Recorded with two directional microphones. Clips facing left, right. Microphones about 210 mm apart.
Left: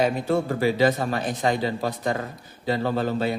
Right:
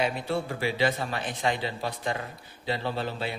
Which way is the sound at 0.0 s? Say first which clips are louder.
Left 6 dB; 45° left (ahead or behind).